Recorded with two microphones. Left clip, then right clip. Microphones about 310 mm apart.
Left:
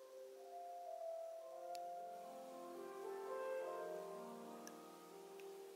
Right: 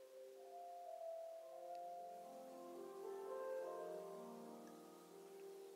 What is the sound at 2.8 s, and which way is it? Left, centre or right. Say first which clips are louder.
Music: left 2 dB; centre.